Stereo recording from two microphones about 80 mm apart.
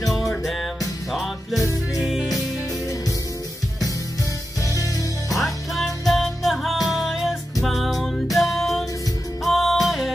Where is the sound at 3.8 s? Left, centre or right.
Left.